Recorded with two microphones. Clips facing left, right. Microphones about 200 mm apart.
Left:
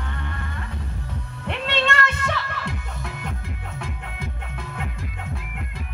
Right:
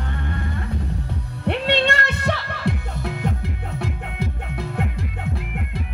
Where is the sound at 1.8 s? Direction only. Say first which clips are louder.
Right 2 dB; 40° right (ahead or behind).